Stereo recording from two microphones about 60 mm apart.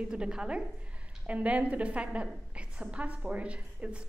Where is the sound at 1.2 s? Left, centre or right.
Right.